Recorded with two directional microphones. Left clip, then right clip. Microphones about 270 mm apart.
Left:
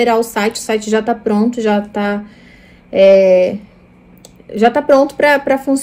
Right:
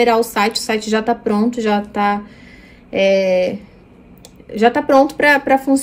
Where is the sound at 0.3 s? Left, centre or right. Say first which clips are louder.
Left 1 dB; centre.